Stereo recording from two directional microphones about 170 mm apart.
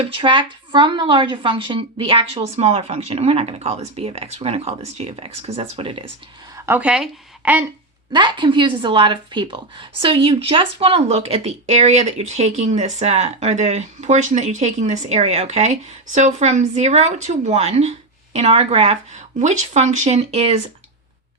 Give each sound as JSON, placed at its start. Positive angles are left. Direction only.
{"t": 0.1, "sound": "a woman's voice", "side_deg": -30}
{"t": 6.7, "sound": "speech", "side_deg": -5}
{"t": 8.1, "sound": "a woman's voice", "side_deg": -25}